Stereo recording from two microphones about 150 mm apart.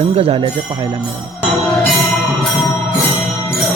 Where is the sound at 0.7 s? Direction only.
30° right (ahead or behind).